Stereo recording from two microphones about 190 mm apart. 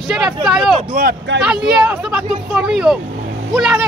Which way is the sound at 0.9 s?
50° right (ahead or behind).